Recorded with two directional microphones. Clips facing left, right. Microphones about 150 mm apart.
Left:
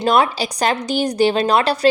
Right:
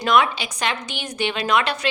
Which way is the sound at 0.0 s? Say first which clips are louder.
Left 3 dB; 35° left (ahead or behind).